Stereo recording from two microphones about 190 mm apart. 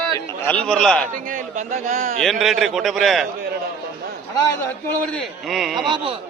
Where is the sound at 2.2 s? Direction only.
Centre (ahead or behind).